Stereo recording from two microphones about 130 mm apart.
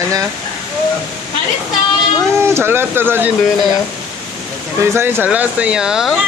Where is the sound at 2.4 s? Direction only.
20° right (ahead or behind).